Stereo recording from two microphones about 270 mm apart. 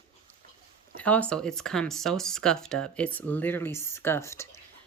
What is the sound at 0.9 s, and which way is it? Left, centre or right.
Speech, centre.